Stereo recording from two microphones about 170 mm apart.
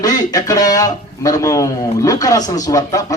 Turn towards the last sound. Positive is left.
turn(degrees=20)  # may be behind; listen again after turning